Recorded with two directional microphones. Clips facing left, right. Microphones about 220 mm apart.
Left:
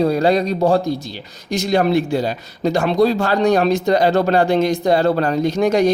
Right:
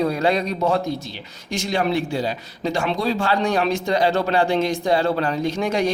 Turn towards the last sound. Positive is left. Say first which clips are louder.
# left 6 dB
turn(degrees=40)  # may be behind; listen again after turning